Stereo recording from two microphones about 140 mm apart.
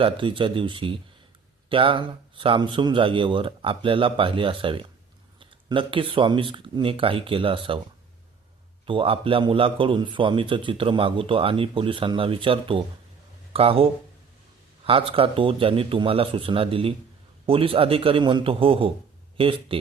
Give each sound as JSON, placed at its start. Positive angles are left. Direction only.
{"t": 0.0, "sound": "a man's voice", "side_deg": -40}
{"t": 8.9, "sound": "a man's voice", "side_deg": -40}